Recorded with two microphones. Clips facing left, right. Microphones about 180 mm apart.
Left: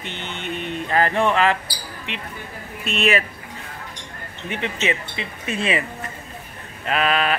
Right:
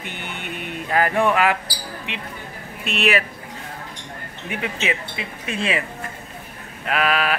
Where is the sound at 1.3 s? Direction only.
10° right (ahead or behind).